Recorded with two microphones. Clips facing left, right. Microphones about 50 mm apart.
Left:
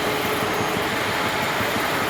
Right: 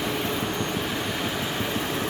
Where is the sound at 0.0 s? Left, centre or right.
Left.